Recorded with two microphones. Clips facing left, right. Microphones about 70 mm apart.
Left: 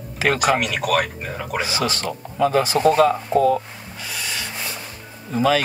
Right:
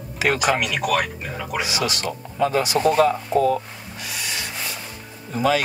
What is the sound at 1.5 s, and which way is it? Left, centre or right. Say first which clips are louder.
Speech: left 1 dB; left.